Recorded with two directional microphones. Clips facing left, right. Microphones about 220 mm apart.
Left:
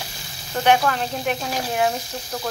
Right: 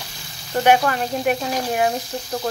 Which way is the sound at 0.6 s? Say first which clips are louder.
Right 2 dB; 10° right (ahead or behind).